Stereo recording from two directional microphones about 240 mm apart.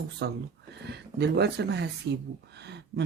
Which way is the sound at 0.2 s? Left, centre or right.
Right.